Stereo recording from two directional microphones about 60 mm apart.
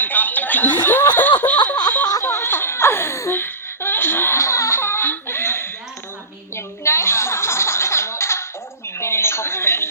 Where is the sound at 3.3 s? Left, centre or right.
Left.